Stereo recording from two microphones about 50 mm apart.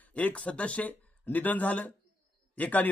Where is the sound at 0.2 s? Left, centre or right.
Left.